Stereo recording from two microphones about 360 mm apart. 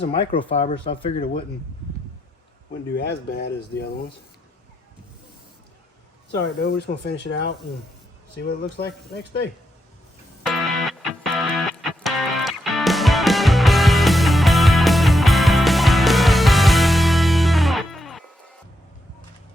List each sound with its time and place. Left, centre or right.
0.0 s speech: centre
2.9 s speech: left
6.3 s speech: left
10.4 s music: centre